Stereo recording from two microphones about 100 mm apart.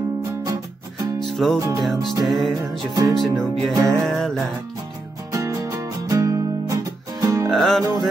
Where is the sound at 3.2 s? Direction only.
5° left (ahead or behind).